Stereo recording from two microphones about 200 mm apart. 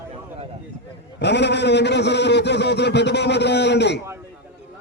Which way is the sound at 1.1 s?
60° left (ahead or behind).